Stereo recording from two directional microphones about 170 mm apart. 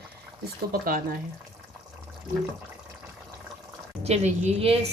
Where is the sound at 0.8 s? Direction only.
55° right (ahead or behind).